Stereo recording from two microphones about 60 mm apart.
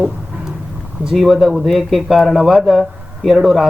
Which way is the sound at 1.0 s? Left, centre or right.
Centre.